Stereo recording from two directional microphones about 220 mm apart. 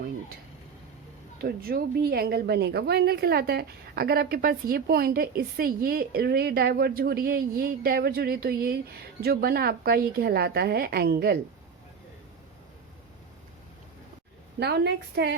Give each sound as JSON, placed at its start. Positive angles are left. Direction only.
{"t": 1.4, "sound": "a woman's voice", "side_deg": -45}
{"t": 14.6, "sound": "a woman's voice", "side_deg": -50}